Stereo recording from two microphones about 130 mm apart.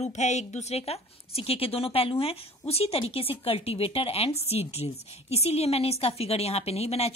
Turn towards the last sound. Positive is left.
turn(degrees=50)  # may be behind; listen again after turning